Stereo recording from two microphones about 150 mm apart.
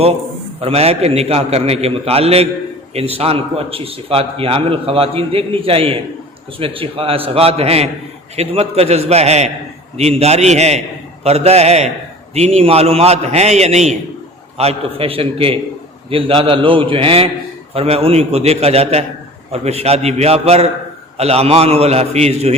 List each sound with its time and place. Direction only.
0.6 s a man's voice: 45° right (ahead or behind)